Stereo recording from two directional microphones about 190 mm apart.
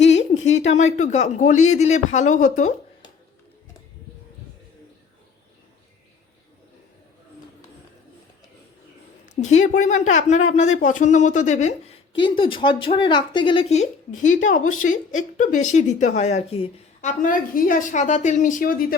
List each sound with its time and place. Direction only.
0.0 s a sound: 35° left (ahead or behind)
0.6 s a woman's voice: 35° left (ahead or behind)
9.3 s a woman's voice: 35° left (ahead or behind)
12.2 s speech: 25° left (ahead or behind)
14.2 s a woman's voice: 40° left (ahead or behind)